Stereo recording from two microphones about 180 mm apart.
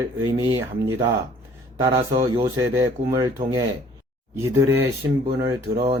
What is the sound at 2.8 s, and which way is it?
Speech, 15° right (ahead or behind).